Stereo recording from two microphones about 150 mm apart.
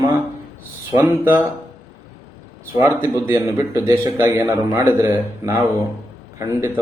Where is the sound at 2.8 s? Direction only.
15° right (ahead or behind).